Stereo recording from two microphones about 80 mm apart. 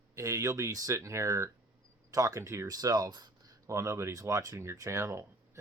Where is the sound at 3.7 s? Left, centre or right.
Right.